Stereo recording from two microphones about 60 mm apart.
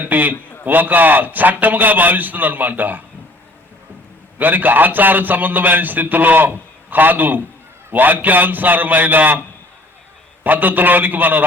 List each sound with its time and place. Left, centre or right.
0.0 s a man's voice: right
4.4 s a man's voice: right
10.4 s a man's voice: right